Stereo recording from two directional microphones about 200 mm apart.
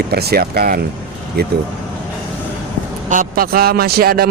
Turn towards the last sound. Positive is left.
turn(degrees=-50)  # may be behind; listen again after turning